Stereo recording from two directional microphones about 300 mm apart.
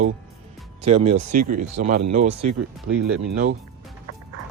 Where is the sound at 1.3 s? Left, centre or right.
Right.